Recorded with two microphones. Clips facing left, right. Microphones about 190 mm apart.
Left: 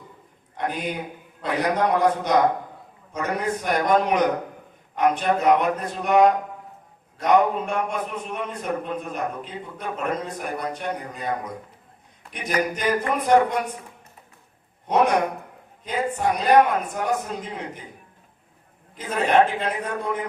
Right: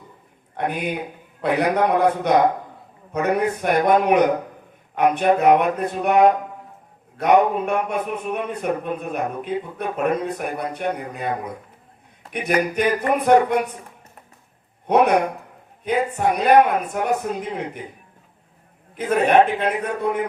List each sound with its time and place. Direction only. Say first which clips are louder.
0.5 s a man's voice: right 3 dB; 60° right (ahead or behind)
12.3 s a man's voice: right 4 dB; 60° right (ahead or behind)
14.8 s a man's voice: right 3 dB; 60° right (ahead or behind)
18.9 s a man's voice: right 4 dB; 60° right (ahead or behind)